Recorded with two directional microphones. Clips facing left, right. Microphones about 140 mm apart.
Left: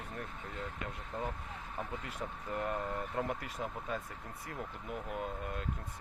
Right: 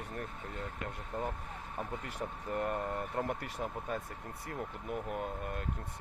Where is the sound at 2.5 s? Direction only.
Centre (ahead or behind).